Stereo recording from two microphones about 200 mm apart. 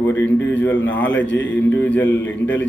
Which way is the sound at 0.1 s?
65° left (ahead or behind).